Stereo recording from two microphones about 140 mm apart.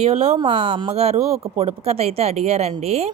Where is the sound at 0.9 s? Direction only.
50° right (ahead or behind).